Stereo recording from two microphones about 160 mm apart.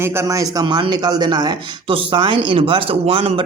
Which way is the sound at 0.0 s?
15° right (ahead or behind).